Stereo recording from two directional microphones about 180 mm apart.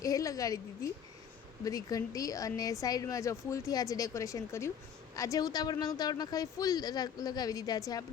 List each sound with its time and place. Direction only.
0.0 s a woman's voice: 20° left (ahead or behind)